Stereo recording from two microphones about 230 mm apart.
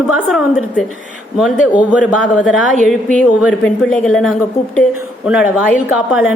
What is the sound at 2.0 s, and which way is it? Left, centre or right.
A woman's voice, centre.